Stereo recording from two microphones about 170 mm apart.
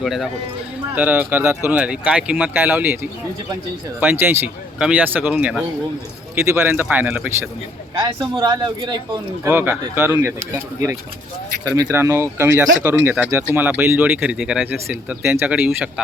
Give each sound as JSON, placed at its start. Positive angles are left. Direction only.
{"t": 0.0, "sound": "a man's voice", "side_deg": 0}
{"t": 9.4, "sound": "speech", "side_deg": -15}